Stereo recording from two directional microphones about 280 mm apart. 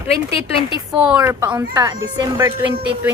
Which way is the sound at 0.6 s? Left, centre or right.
Centre.